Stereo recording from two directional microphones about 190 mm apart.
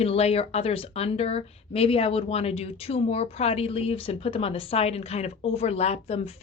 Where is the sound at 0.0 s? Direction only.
35° left (ahead or behind).